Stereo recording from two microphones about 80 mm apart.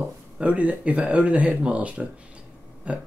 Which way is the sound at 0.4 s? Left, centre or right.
Centre.